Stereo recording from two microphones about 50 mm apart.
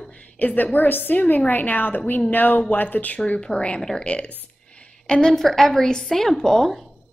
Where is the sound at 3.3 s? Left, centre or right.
Centre.